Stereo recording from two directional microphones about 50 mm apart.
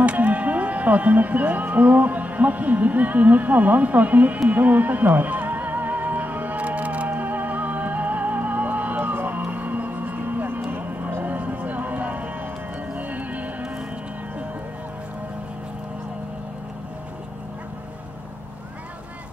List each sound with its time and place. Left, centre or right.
0.0 s music: right
10.7 s a sound: right
11.2 s music: right